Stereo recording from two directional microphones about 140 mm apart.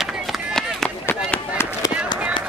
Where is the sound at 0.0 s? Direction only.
Centre (ahead or behind).